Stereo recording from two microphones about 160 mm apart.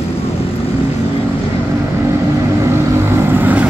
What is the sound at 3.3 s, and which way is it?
Vehicle, 10° right (ahead or behind).